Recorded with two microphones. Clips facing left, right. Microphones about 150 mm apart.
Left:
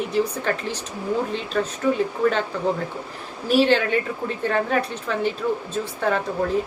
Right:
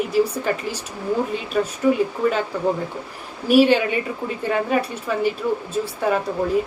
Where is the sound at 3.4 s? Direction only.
10° right (ahead or behind).